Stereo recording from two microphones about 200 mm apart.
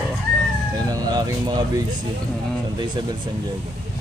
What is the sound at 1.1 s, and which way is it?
Speech, 20° right (ahead or behind).